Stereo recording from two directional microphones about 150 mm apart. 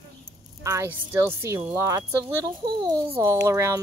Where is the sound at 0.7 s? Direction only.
15° right (ahead or behind).